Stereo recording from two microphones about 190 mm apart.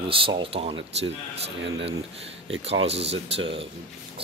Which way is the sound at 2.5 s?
70° right (ahead or behind).